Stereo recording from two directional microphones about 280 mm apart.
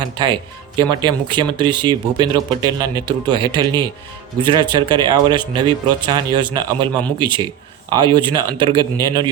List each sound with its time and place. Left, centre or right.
0.0 s speech: centre